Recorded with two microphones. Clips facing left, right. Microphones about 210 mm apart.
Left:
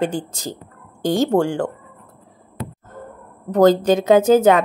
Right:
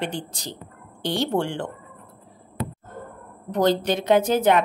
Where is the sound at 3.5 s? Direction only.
45° left (ahead or behind).